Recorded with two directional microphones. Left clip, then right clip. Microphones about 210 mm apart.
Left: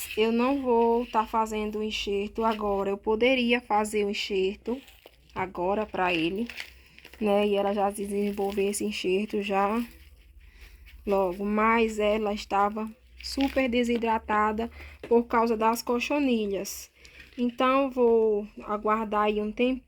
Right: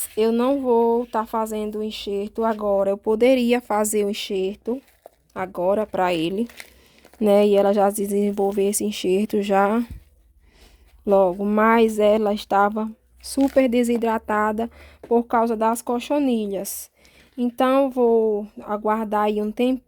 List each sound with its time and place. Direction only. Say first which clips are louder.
0.2 s speech: right 6 dB; 50° right (ahead or behind)
11.0 s speech: right 9 dB; 45° right (ahead or behind)